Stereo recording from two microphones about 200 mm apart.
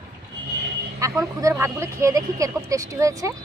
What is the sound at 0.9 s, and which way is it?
Speech, 15° right (ahead or behind).